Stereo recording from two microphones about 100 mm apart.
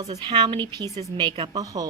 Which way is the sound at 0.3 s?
50° right (ahead or behind).